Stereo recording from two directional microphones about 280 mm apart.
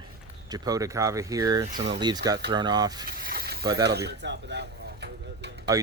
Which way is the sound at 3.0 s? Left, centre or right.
Right.